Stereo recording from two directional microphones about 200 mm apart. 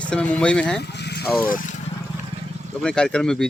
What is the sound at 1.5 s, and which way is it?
Speech, 40° left (ahead or behind).